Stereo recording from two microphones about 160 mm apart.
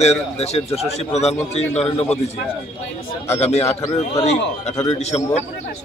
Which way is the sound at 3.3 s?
40° left (ahead or behind).